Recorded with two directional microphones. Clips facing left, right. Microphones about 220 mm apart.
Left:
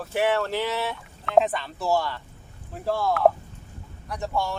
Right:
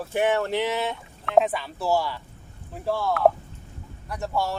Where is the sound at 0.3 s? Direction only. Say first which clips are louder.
Right 2 dB; 20° right (ahead or behind).